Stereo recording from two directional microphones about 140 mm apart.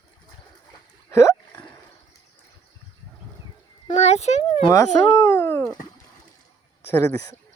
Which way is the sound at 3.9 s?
50° left (ahead or behind).